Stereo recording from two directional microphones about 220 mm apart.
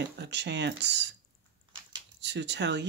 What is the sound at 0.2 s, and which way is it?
Speech, 50° right (ahead or behind).